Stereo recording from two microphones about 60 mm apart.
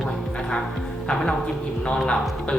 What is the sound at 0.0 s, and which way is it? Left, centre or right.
Music, centre.